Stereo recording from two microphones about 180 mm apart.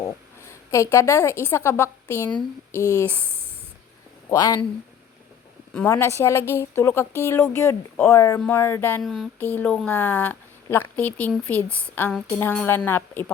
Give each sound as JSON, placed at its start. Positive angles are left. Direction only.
{"t": 0.0, "sound": "a sound", "side_deg": 15}
{"t": 1.5, "sound": "speech", "side_deg": 15}
{"t": 4.3, "sound": "speech", "side_deg": 20}
{"t": 5.7, "sound": "speech", "side_deg": 10}